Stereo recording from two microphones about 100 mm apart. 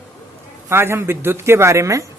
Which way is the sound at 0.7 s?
25° right (ahead or behind).